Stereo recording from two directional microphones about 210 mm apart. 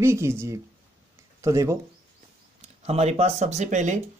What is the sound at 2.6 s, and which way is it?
Speech, 30° right (ahead or behind).